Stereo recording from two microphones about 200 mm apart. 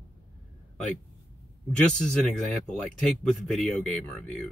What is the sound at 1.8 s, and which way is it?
Speech, 5° left (ahead or behind).